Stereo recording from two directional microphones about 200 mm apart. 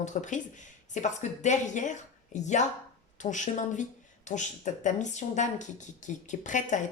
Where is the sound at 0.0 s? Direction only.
40° left (ahead or behind).